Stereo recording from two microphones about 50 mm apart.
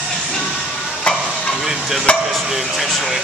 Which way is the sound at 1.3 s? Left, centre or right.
Centre.